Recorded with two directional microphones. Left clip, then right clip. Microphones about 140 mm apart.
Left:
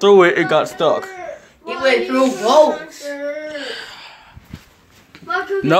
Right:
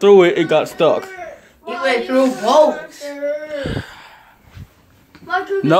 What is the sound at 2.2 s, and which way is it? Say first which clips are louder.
Speech: left 1 dB; 30° right (ahead or behind).